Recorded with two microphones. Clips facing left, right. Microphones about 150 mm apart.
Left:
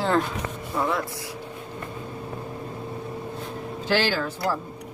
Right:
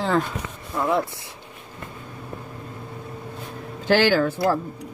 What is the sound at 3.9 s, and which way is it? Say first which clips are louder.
Speech: right 6 dB; 55° right (ahead or behind).